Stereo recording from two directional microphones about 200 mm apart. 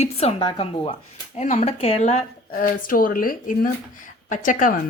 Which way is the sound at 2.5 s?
45° left (ahead or behind).